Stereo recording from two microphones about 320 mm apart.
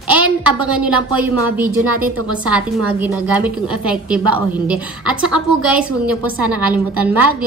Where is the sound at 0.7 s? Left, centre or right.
Centre.